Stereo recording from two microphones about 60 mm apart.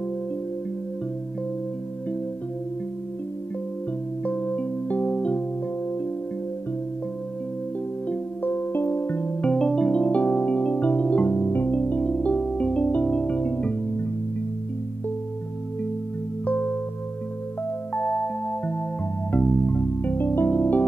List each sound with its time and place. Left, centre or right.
4.2 s music: left
8.1 s music: left
17.9 s music: centre